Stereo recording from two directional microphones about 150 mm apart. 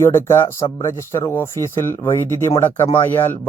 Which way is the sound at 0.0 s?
15° left (ahead or behind).